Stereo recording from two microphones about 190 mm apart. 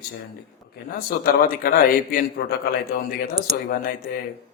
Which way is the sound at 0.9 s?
50° left (ahead or behind).